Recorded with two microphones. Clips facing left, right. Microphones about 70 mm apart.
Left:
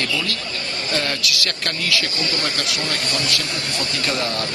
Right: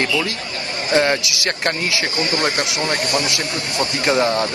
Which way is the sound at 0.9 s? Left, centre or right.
Right.